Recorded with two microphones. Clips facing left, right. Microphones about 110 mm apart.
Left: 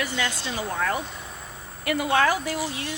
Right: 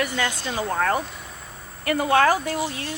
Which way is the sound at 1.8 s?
40° right (ahead or behind).